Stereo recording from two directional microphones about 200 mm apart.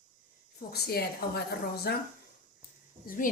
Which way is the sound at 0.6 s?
50° left (ahead or behind).